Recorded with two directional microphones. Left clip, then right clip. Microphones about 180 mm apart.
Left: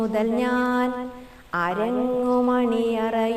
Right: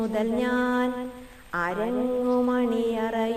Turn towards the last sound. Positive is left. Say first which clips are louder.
# left 3 dB
turn(degrees=35)  # may be behind; listen again after turning